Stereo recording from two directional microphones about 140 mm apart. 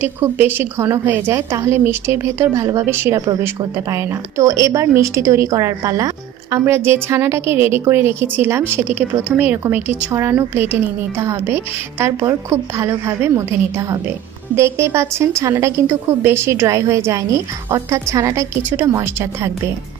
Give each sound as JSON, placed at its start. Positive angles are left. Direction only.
{"t": 0.0, "sound": "a woman's voice", "side_deg": -15}